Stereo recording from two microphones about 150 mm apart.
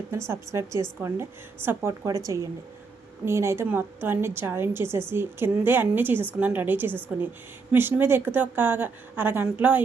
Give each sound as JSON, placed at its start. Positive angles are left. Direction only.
{"t": 0.3, "sound": "a woman's voice", "side_deg": -20}